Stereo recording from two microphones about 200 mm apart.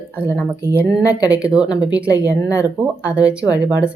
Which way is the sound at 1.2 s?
5° right (ahead or behind).